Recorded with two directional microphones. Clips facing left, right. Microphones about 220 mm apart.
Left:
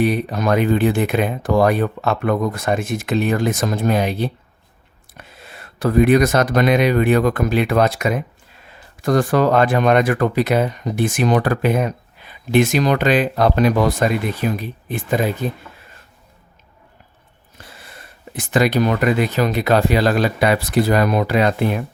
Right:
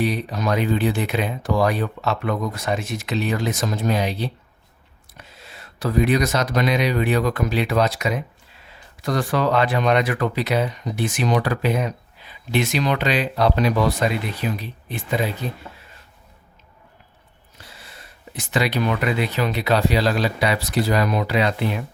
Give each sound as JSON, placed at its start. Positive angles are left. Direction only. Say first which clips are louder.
{"t": 0.0, "sound": "speech", "louder": "left 5 dB", "side_deg": 55}
{"t": 17.6, "sound": "speech", "louder": "left 3 dB", "side_deg": 55}